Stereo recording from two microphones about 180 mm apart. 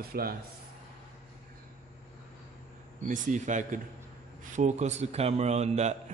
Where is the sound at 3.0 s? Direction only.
45° right (ahead or behind).